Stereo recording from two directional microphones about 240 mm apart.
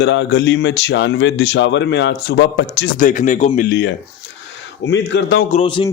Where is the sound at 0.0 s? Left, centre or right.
Left.